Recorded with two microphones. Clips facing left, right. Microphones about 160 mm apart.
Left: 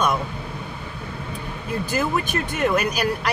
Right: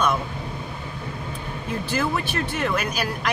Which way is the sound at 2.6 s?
10° left (ahead or behind).